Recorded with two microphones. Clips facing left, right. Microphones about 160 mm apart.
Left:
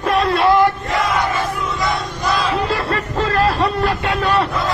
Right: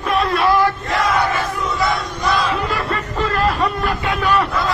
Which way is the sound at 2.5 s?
35° left (ahead or behind).